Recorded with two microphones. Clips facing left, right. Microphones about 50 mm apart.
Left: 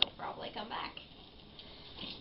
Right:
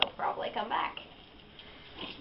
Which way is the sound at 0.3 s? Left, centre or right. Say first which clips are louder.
Right 9 dB; right.